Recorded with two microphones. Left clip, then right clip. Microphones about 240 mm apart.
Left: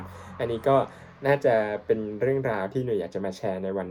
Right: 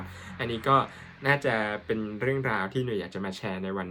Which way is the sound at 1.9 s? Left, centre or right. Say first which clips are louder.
Left 5 dB; centre.